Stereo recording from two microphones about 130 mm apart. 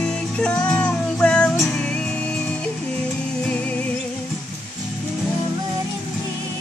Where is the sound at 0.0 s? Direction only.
5° left (ahead or behind).